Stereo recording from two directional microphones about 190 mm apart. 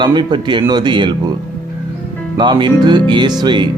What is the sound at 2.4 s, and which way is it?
Speech, 25° right (ahead or behind).